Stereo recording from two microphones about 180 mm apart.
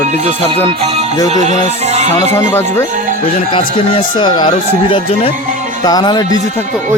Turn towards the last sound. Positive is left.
turn(degrees=25)  # may be behind; listen again after turning